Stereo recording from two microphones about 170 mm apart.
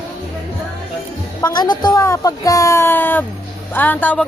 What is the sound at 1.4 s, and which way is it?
A woman's voice, 20° left (ahead or behind).